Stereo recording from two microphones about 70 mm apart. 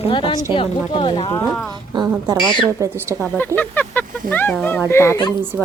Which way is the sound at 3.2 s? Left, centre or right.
Left.